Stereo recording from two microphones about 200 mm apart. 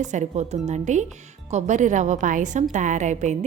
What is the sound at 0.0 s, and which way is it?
A woman's voice, 35° right (ahead or behind).